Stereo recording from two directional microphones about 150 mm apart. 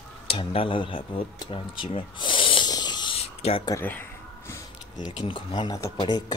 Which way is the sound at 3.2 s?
40° left (ahead or behind).